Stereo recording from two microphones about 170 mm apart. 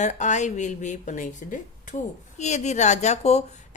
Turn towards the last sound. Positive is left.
turn(degrees=40)  # may be behind; listen again after turning